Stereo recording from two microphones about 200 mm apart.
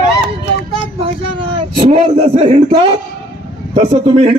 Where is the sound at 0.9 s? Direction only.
25° right (ahead or behind).